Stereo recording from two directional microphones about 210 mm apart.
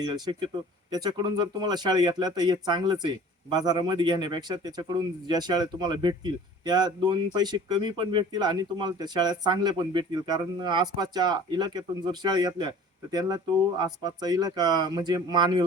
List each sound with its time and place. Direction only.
0.0 s speech: 20° right (ahead or behind)